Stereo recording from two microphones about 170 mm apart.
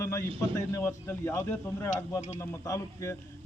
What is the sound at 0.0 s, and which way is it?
A man's voice, 15° left (ahead or behind).